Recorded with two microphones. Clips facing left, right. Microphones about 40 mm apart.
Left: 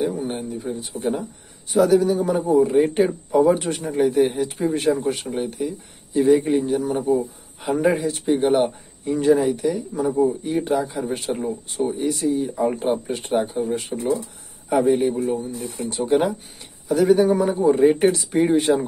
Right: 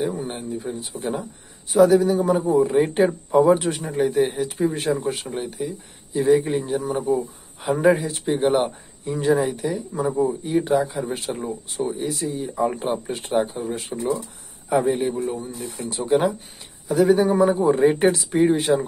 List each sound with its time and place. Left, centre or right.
0.2 s speech: centre